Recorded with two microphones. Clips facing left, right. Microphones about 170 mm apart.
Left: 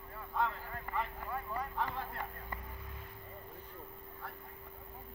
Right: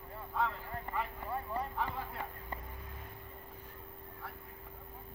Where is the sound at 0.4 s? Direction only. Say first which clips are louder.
Even; centre (ahead or behind).